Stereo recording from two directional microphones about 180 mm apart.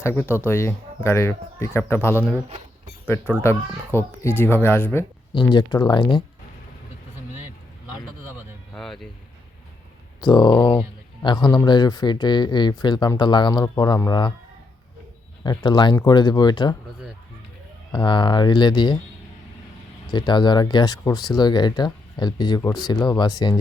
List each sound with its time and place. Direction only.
0.0 s speech: 15° left (ahead or behind)
3.4 s speech: 15° left (ahead or behind)
5.5 s speech: 25° left (ahead or behind)
8.7 s a sound: centre (ahead or behind)
10.2 s speech: 25° left (ahead or behind)
15.4 s speech: 25° left (ahead or behind)
17.9 s speech: 25° left (ahead or behind)
20.1 s speech: 25° left (ahead or behind)